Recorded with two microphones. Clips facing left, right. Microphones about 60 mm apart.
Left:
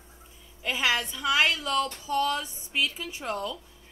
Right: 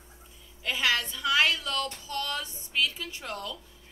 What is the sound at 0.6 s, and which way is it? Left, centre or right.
A woman's voice, centre.